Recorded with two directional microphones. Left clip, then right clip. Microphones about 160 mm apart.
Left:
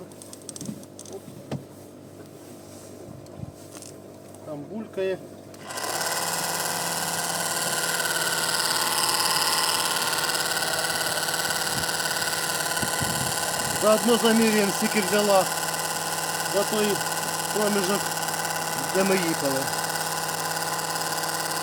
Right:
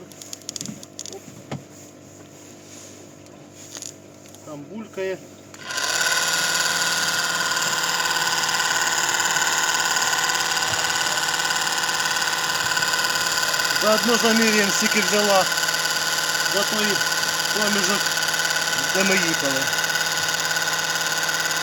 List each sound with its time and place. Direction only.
0.3 s typing: 20° right (ahead or behind)
5.8 s a sound: 20° left (ahead or behind)
14.1 s speech: 5° right (ahead or behind)
14.7 s speech: 20° left (ahead or behind)
15.4 s engine: 15° left (ahead or behind)
17.7 s speech: centre (ahead or behind)
18.0 s engine: 20° left (ahead or behind)
18.9 s speech: centre (ahead or behind)
19.5 s a sound: 25° left (ahead or behind)